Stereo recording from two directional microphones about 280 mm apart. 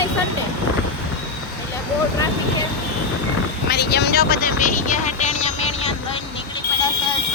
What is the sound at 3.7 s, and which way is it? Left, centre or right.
Speech, left.